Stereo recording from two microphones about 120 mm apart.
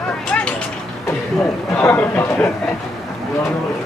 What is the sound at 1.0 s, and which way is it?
Speech, 20° left (ahead or behind).